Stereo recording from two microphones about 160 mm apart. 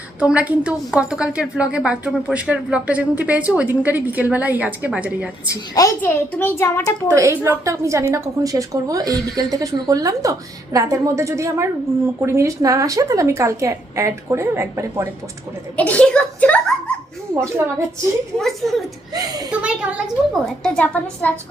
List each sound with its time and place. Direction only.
0.2 s a woman's voice: 10° right (ahead or behind)
6.0 s a child's voice: 10° left (ahead or behind)
7.1 s a woman's voice: 20° right (ahead or behind)
15.7 s chuckle: 10° left (ahead or behind)
17.3 s a woman's voice: 15° right (ahead or behind)
18.3 s a woman's voice: centre (ahead or behind)
19.1 s a woman's voice: 25° right (ahead or behind)
19.5 s a woman's voice: 5° right (ahead or behind)
20.7 s a child's voice: 10° left (ahead or behind)